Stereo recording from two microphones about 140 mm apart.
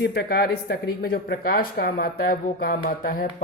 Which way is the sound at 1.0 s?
90° left.